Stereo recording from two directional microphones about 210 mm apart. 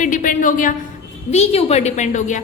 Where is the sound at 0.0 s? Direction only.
40° left (ahead or behind).